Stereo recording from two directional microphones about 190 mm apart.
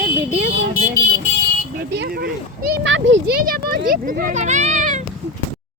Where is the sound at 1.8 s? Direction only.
65° right (ahead or behind).